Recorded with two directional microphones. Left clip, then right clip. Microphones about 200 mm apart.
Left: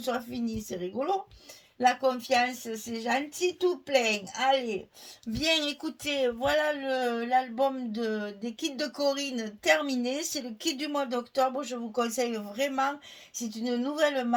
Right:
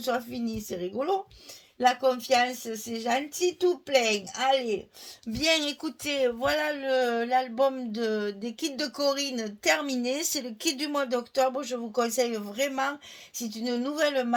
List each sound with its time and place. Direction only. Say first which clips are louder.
0.0 s speech: right 2 dB; 40° right (ahead or behind)